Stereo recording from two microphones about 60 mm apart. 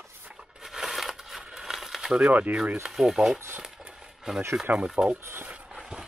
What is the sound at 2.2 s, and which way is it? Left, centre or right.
Speech, right.